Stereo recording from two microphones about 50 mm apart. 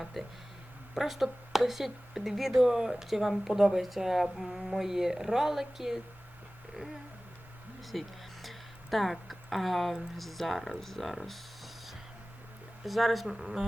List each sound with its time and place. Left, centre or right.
0.0 s speech: centre
7.9 s a sound: centre
10.2 s speech: centre